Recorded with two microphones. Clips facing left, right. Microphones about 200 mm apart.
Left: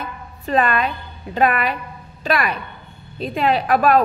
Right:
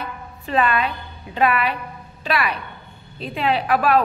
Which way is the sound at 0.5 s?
45° left (ahead or behind).